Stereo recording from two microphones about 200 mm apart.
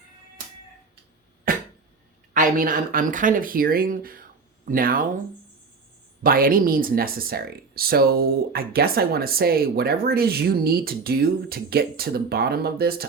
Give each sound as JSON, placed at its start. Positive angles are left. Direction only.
{"t": 1.5, "sound": "cough", "side_deg": -45}
{"t": 2.3, "sound": "speech", "side_deg": -45}
{"t": 6.2, "sound": "speech", "side_deg": -45}